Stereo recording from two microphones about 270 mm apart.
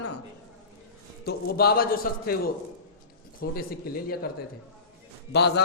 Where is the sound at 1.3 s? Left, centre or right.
Left.